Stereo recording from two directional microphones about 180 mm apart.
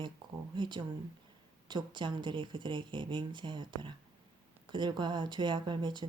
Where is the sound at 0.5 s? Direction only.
25° right (ahead or behind).